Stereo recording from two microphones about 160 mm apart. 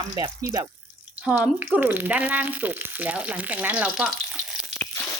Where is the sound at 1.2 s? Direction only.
10° right (ahead or behind).